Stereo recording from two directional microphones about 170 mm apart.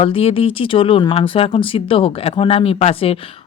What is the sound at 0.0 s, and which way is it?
Speech, 35° left (ahead or behind).